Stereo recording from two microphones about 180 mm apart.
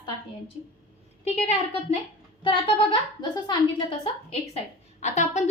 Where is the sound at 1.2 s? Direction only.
40° left (ahead or behind).